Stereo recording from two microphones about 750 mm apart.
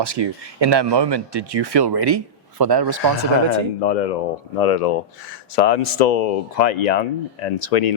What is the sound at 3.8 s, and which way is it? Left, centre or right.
Speech, left.